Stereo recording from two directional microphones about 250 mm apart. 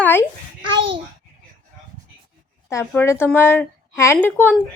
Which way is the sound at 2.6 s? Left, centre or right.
Centre.